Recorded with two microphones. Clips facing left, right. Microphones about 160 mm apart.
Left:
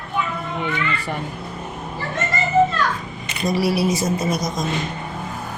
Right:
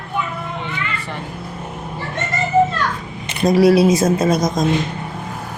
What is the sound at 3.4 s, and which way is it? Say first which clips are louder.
Speech: right 8 dB; 90° right.